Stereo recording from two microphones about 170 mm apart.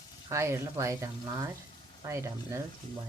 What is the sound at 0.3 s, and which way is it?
Speech, 15° right (ahead or behind).